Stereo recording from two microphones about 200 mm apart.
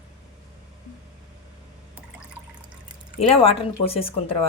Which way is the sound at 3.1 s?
30° left (ahead or behind).